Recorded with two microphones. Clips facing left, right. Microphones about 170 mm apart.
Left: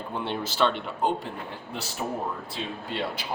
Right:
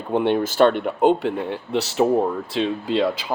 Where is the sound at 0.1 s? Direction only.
60° right (ahead or behind); by 2.0 s 80° right.